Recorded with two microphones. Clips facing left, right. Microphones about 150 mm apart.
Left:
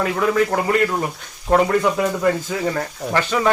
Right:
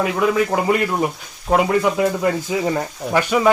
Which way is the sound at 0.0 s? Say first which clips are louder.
Right 1 dB; 15° right (ahead or behind).